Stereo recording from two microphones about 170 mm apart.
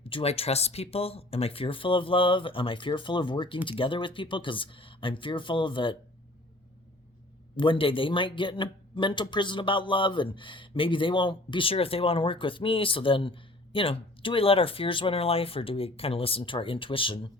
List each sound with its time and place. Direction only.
0.0 s speech: 35° left (ahead or behind)
7.5 s speech: 30° left (ahead or behind)